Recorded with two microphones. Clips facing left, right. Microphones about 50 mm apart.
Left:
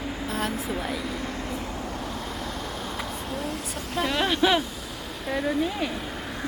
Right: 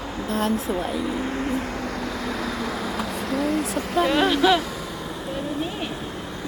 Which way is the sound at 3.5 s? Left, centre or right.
Right.